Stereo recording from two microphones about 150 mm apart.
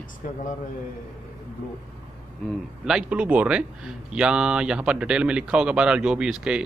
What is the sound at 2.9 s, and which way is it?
Speech, 5° right (ahead or behind).